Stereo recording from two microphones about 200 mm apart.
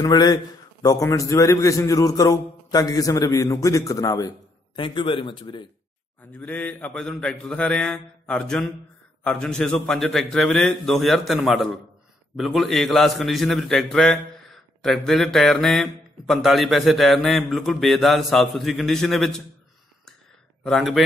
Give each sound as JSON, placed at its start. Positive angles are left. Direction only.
{"t": 0.0, "sound": "a man's voice", "side_deg": 20}
{"t": 6.3, "sound": "a man's voice", "side_deg": 10}
{"t": 20.6, "sound": "a man's voice", "side_deg": 0}